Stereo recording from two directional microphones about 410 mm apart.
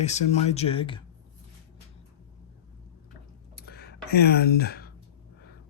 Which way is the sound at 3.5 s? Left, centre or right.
Left.